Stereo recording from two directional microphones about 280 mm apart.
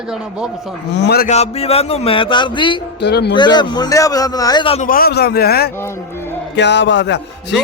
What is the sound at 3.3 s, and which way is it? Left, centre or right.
A man's voice, centre.